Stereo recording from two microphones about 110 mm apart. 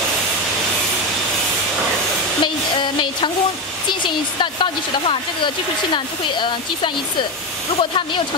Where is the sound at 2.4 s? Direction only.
45° left (ahead or behind).